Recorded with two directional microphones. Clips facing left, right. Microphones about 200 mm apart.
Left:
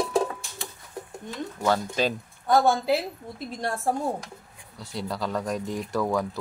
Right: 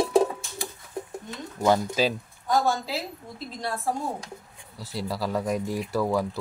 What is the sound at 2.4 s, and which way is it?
A woman's voice, 55° left (ahead or behind).